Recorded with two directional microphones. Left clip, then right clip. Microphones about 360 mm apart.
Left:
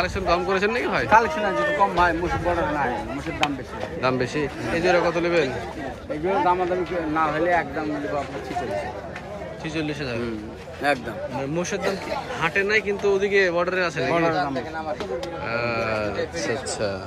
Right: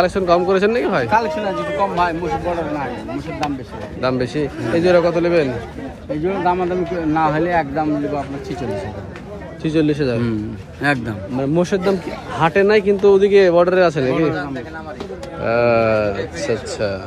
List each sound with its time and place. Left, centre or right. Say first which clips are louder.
0.0 s speech: right 7 dB; centre
4.0 s speech: right 4 dB; centre
6.2 s speech: right 2 dB; right
9.6 s speech: right 12 dB; centre
10.8 s speech: right 4 dB; right
11.5 s speech: right 9 dB; centre
15.4 s speech: right 12 dB; centre